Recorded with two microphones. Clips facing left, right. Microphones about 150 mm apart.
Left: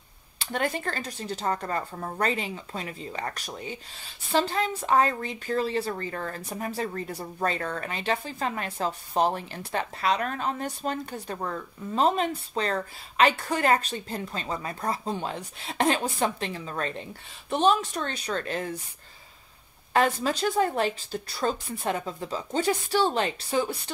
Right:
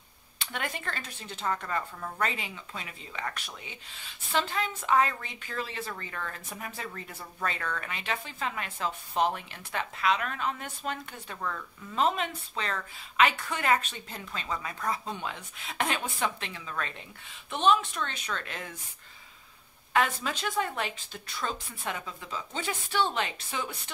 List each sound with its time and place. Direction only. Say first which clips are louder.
0.4 s speech: left 8 dB; 35° left (ahead or behind)
19.9 s speech: left 4 dB; 35° left (ahead or behind)